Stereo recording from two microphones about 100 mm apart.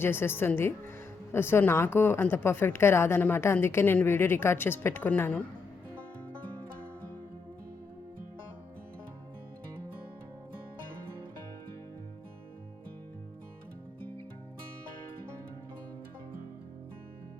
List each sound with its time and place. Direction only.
0.0 s a woman's voice: 20° left (ahead or behind)